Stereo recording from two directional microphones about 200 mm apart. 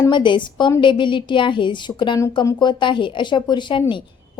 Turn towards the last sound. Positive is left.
turn(degrees=25)  # may be behind; listen again after turning